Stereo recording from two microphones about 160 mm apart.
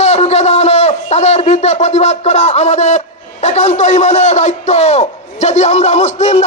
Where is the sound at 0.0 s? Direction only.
45° left (ahead or behind).